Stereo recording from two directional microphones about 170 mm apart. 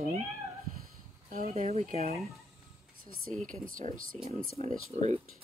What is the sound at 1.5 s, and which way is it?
Speech, 40° right (ahead or behind).